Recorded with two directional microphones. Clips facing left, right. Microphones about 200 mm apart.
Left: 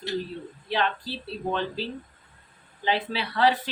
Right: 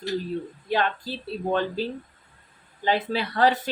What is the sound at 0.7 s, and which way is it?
Speech, 45° right (ahead or behind).